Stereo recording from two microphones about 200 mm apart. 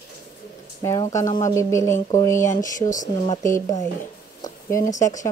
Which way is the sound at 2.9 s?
40° left (ahead or behind).